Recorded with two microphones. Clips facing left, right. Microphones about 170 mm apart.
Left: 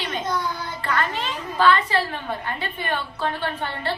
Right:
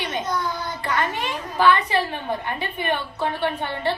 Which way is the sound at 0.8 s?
15° right (ahead or behind).